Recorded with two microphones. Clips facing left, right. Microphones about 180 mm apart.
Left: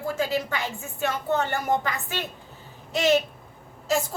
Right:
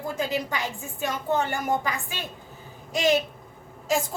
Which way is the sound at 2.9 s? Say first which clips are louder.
Left 1 dB; 15° right (ahead or behind).